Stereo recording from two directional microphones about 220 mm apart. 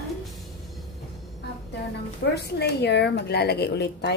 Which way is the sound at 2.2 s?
55° left (ahead or behind).